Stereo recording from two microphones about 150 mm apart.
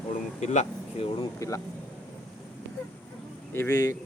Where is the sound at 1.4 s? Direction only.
20° left (ahead or behind).